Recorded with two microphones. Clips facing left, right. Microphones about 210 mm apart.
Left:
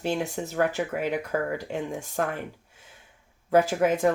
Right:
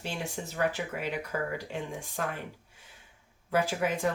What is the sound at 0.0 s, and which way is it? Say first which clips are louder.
Speech: left 8 dB; 45° left (ahead or behind).